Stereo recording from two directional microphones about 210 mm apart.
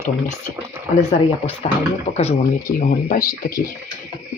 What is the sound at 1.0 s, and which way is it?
Speech, 30° left (ahead or behind).